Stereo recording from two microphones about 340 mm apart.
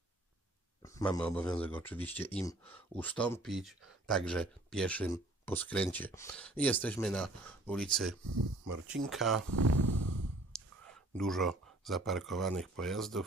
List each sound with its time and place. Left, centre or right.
0.8 s speech: centre
9.5 s a sound: right
10.5 s clicking: centre
11.1 s speech: centre